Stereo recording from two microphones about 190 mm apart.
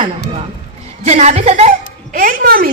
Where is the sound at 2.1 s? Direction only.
50° right (ahead or behind).